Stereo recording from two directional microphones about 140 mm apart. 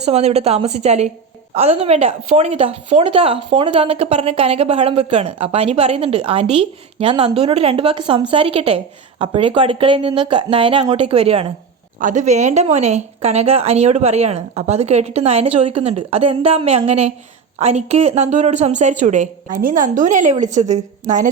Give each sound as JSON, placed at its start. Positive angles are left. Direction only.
{"t": 0.0, "sound": "a woman's voice", "side_deg": -50}
{"t": 11.9, "sound": "a woman's voice", "side_deg": -65}